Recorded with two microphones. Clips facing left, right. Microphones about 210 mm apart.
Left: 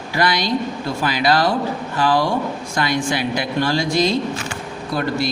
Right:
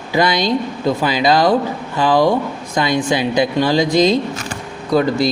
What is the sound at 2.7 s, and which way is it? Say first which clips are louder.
Speech: right 5 dB; 20° right (ahead or behind).